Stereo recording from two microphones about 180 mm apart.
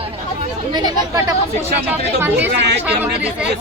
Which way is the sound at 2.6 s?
70° right (ahead or behind).